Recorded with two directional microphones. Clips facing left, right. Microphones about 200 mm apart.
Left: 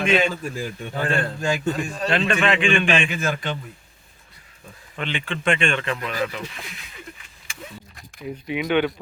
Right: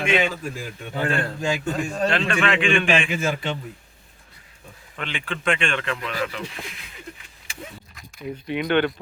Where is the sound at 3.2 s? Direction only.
25° right (ahead or behind).